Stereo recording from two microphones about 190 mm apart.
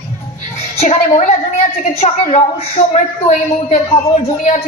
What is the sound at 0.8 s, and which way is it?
A woman's voice, 40° left (ahead or behind).